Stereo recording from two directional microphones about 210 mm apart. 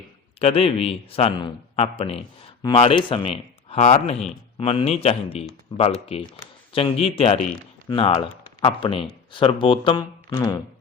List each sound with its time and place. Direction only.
0.3 s a man's voice: 30° left (ahead or behind)